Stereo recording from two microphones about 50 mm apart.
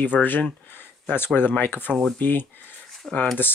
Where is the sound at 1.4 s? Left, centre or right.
Left.